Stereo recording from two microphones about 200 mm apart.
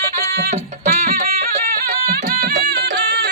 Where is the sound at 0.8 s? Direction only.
45° right (ahead or behind).